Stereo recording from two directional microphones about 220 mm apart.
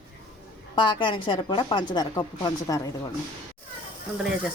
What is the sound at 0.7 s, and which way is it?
Speech, 20° left (ahead or behind).